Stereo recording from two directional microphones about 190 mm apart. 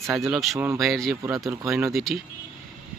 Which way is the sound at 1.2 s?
15° right (ahead or behind).